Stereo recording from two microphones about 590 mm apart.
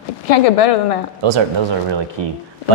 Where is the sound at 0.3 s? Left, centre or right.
Left.